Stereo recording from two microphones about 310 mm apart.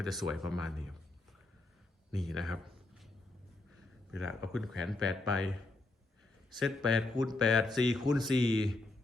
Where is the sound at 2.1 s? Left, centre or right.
Centre.